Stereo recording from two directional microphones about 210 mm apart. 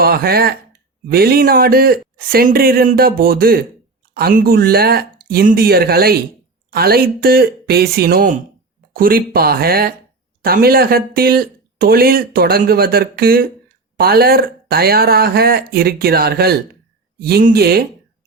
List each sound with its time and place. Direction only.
0.0 s speech: 45° right (ahead or behind)